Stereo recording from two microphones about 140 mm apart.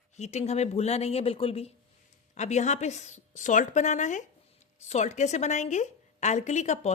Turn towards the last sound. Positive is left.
turn(degrees=55)  # may be behind; listen again after turning